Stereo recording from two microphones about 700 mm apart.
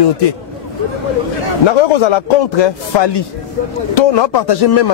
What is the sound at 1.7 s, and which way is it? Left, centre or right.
Speech, left.